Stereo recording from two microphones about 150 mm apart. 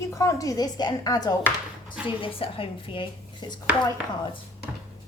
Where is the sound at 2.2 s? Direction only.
40° left (ahead or behind).